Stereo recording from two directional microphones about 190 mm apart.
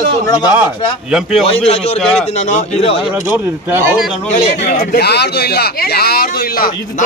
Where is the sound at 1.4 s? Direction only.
30° left (ahead or behind).